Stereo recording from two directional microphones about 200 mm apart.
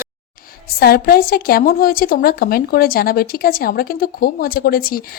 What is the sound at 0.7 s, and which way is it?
A woman's voice, 50° left (ahead or behind).